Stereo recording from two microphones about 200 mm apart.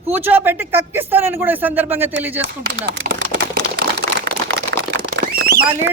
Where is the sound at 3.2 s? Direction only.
50° right (ahead or behind).